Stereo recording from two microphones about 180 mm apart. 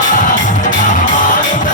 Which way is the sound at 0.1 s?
45° left (ahead or behind).